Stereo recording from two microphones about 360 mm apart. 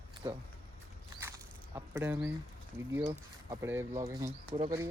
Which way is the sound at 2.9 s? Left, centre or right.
Centre.